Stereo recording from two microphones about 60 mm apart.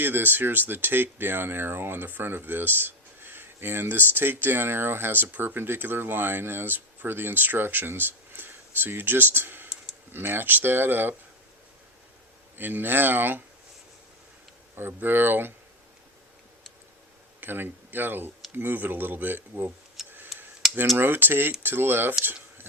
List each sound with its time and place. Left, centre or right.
0.0 s speech: right
12.5 s speech: right
14.8 s speech: right
17.4 s speech: right
20.1 s tick: right
20.3 s a sound: centre
20.9 s speech: right